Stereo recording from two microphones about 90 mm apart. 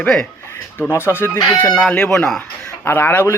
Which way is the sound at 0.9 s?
25° left (ahead or behind).